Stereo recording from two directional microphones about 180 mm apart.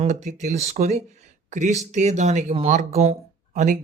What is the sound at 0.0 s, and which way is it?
Speech, 40° right (ahead or behind).